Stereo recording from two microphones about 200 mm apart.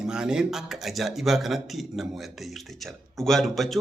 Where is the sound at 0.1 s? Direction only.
5° right (ahead or behind).